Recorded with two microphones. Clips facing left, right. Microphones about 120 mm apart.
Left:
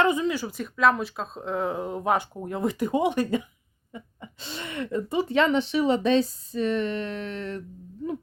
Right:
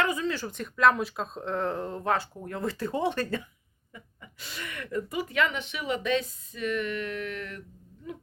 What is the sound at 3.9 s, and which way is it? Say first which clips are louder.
Speech: left 7 dB; 25° left (ahead or behind).